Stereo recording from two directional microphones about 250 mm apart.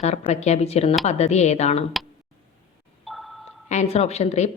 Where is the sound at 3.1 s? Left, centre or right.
Centre.